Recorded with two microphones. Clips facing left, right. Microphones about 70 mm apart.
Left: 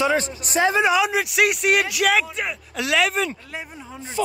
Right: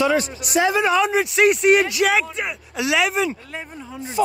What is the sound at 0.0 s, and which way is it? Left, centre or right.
Speech, left.